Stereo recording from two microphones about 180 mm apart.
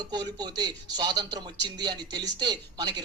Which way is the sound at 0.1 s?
20° right (ahead or behind).